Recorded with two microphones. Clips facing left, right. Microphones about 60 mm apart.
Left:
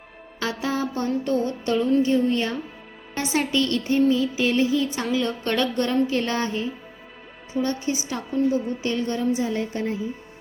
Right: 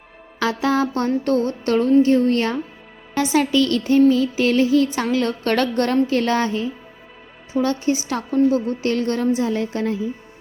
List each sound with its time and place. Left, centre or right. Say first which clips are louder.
0.3 s a woman's voice: right 7 dB; right
3.5 s a woman's voice: right 5 dB; right
5.1 s a woman's voice: right 3 dB; right